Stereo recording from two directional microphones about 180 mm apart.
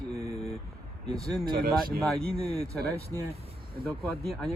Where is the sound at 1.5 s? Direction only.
55° right (ahead or behind).